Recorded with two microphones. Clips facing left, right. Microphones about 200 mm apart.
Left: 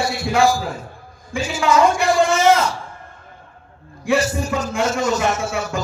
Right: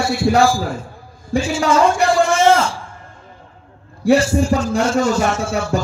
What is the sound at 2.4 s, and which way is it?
Speech, 30° right (ahead or behind).